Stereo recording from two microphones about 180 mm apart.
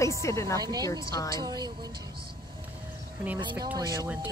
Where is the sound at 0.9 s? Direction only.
20° left (ahead or behind).